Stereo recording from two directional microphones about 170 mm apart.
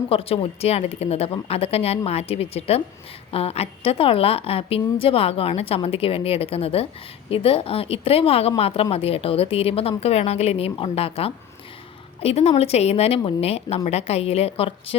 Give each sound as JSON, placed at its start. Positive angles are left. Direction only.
{"t": 0.1, "sound": "a woman's voice", "side_deg": 35}